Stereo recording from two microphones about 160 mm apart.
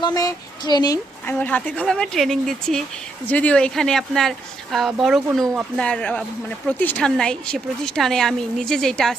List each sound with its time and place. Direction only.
0.0 s speech: 25° left (ahead or behind)
1.3 s a woman's voice: 10° left (ahead or behind)